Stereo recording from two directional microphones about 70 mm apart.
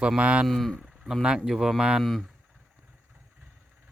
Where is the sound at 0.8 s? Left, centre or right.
Centre.